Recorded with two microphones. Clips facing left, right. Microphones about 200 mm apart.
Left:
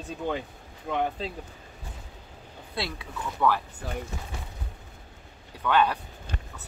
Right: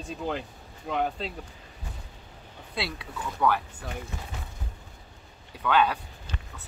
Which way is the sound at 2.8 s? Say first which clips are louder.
Even; centre (ahead or behind).